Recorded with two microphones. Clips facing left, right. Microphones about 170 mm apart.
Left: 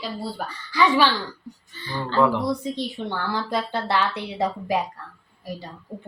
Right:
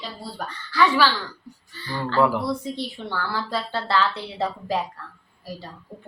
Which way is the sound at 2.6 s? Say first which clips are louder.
Left 2 dB; 20° left (ahead or behind).